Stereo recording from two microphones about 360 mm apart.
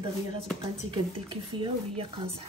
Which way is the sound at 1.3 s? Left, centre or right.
Centre.